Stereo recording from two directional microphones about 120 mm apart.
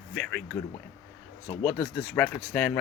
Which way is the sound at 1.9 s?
10° left (ahead or behind).